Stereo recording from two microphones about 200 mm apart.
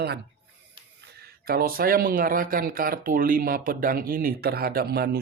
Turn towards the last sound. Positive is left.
turn(degrees=-50)  # may be behind; listen again after turning